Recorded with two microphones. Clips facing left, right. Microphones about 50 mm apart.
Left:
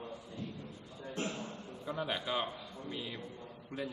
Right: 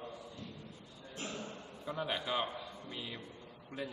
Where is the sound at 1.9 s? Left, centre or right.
Centre.